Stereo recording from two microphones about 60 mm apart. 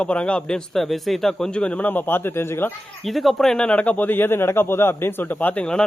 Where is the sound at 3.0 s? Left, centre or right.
Centre; by 5.6 s left.